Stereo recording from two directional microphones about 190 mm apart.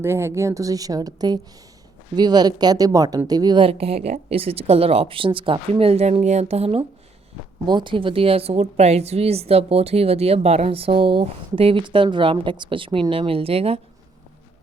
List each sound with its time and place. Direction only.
0.0 s a woman's voice: 15° right (ahead or behind); by 13.7 s 30° right (ahead or behind)